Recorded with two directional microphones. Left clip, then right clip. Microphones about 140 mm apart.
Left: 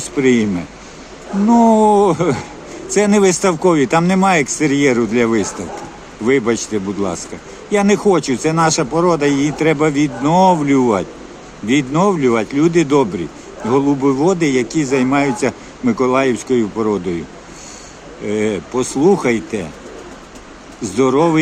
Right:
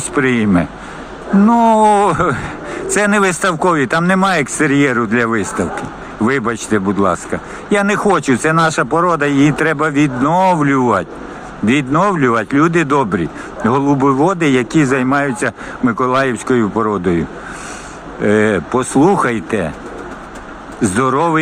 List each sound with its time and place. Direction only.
0.2 s speech: 15° right (ahead or behind)
18.3 s speech: 15° right (ahead or behind)
20.8 s speech: 20° right (ahead or behind)